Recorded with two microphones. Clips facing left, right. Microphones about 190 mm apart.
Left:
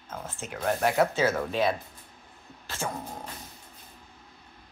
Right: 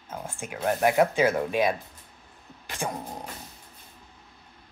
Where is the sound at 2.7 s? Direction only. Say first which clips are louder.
Right 2 dB; 15° right (ahead or behind).